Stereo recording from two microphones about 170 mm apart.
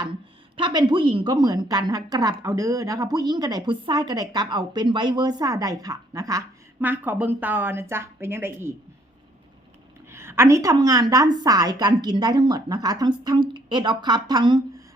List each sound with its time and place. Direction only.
0.5 s a woman's voice: 25° right (ahead or behind)
10.1 s a woman's voice: 15° right (ahead or behind)